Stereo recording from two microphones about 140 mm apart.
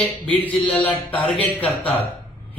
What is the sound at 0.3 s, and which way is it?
Speech, 10° left (ahead or behind).